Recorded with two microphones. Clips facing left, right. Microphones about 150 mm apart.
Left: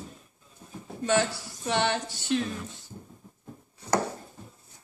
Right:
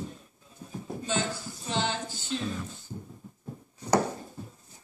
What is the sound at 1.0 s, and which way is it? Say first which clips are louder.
Speech: left 7 dB; 70° left (ahead or behind).